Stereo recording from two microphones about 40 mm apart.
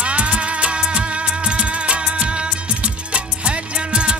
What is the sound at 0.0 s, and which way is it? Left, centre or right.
Music, right.